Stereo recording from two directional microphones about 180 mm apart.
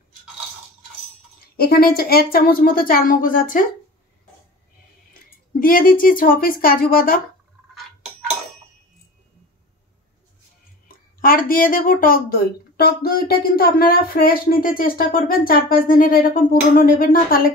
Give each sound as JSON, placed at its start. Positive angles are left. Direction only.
{"t": 1.6, "sound": "speech", "side_deg": 60}
{"t": 5.6, "sound": "speech", "side_deg": 50}
{"t": 10.9, "sound": "speech", "side_deg": 50}